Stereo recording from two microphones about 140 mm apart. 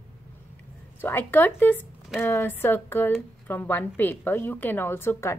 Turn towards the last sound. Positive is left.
turn(degrees=20)  # may be behind; listen again after turning